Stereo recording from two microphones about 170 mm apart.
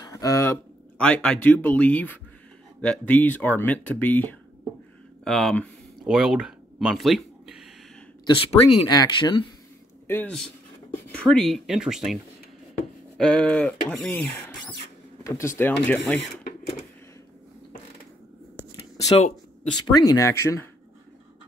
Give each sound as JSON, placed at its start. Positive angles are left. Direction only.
{"t": 0.0, "sound": "speech", "side_deg": 20}
{"t": 5.2, "sound": "a sound", "side_deg": 0}
{"t": 8.4, "sound": "speech", "side_deg": 35}
{"t": 8.8, "sound": "speech", "side_deg": 25}
{"t": 10.0, "sound": "speech", "side_deg": 10}
{"t": 13.2, "sound": "speech", "side_deg": 5}
{"t": 19.9, "sound": "speech", "side_deg": 20}